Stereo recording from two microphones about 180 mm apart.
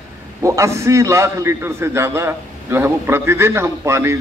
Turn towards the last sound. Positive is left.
turn(degrees=-15)  # may be behind; listen again after turning